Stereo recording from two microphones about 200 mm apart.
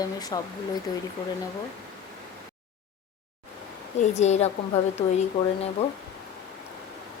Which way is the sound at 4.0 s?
35° left (ahead or behind).